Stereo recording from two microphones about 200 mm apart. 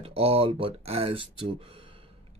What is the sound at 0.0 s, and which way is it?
Speech, 30° right (ahead or behind).